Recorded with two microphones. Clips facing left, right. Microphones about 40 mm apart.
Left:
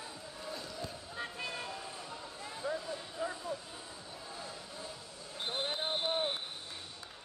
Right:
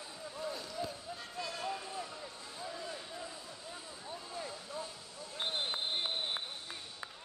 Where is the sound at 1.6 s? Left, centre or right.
Centre.